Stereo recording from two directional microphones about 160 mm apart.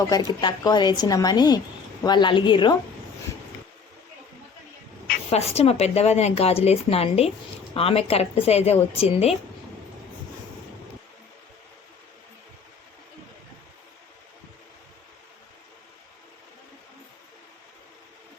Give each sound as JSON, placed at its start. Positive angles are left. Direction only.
{"t": 0.3, "sound": "speech", "side_deg": 25}
{"t": 5.3, "sound": "a woman's voice", "side_deg": 40}